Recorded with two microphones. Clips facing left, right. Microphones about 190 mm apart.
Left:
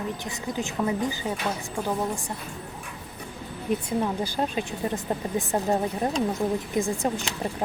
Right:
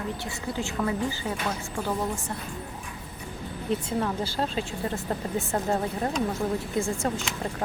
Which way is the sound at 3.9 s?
15° left (ahead or behind).